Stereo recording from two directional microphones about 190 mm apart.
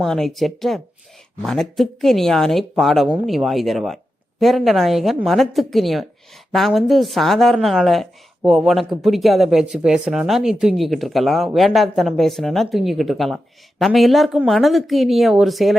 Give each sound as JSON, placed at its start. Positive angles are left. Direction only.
{"t": 0.0, "sound": "speech", "side_deg": 0}